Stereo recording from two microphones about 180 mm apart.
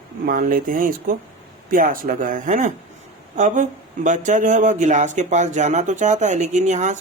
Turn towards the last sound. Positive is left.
turn(degrees=-40)  # may be behind; listen again after turning